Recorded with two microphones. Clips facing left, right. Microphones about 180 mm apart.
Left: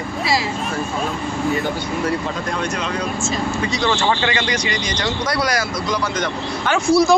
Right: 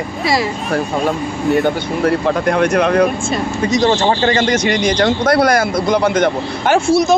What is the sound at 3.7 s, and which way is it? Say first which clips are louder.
Speech: right 7 dB; 40° right (ahead or behind).